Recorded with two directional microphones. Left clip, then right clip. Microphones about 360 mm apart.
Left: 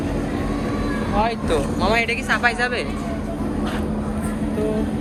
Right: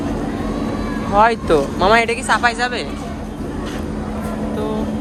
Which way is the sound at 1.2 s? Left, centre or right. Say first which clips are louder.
Right 9 dB; right.